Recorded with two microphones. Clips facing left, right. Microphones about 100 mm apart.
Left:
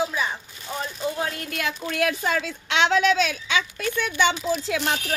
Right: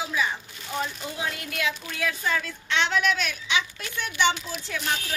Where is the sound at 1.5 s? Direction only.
50° left (ahead or behind).